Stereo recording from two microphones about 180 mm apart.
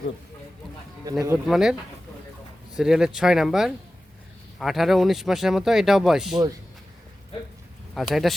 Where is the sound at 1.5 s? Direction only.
Centre (ahead or behind).